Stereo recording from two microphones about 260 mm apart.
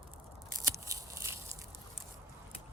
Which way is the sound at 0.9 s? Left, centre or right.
Centre.